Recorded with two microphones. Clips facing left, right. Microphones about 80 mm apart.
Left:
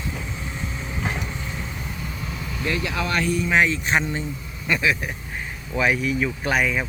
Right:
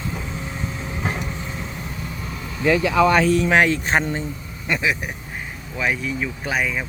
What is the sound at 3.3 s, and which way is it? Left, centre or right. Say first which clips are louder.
Speech: right 3 dB; right.